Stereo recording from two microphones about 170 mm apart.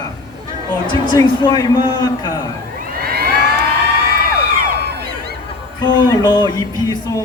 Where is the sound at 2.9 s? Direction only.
65° right (ahead or behind).